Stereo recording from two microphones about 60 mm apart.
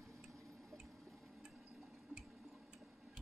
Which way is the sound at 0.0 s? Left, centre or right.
Centre.